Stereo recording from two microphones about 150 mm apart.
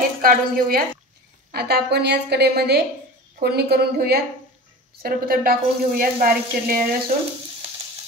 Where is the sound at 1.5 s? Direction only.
90° right.